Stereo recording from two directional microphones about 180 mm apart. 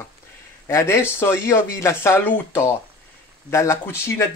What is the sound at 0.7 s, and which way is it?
Speech, 15° left (ahead or behind).